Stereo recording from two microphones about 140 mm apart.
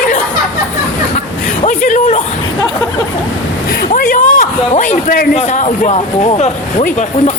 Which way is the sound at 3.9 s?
85° left.